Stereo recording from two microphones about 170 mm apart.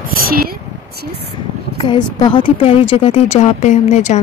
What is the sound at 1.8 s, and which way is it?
A woman's voice, 25° left (ahead or behind).